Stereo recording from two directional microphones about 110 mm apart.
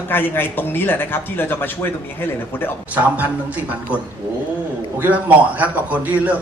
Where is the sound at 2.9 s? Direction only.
15° right (ahead or behind).